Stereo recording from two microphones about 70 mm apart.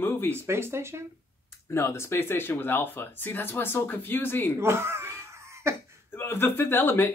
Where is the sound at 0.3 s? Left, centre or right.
Right.